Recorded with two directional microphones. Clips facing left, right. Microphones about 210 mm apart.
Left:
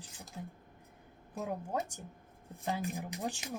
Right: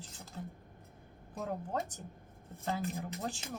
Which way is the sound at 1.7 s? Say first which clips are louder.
Left 1 dB; 10° left (ahead or behind).